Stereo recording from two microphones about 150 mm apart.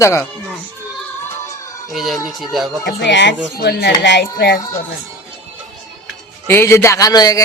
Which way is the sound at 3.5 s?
90° left.